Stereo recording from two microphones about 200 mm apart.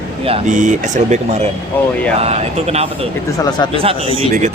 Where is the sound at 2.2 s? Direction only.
30° right (ahead or behind).